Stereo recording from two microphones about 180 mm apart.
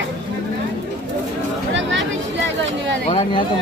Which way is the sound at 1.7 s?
90° right.